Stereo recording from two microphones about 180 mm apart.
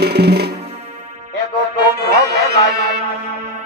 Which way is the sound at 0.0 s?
65° right (ahead or behind).